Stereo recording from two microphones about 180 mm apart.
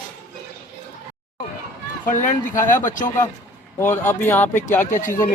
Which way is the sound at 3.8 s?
10° left (ahead or behind).